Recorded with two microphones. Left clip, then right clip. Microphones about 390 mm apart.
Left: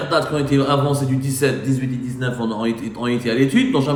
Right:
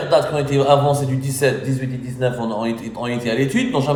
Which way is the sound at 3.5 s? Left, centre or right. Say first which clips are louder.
Left 2 dB; centre.